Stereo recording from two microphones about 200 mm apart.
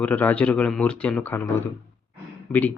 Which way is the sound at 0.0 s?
10° left (ahead or behind).